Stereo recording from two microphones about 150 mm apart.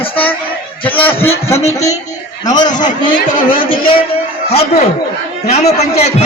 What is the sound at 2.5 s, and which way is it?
A man's voice, 30° left (ahead or behind).